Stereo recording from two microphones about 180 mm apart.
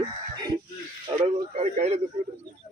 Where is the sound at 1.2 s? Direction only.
35° right (ahead or behind).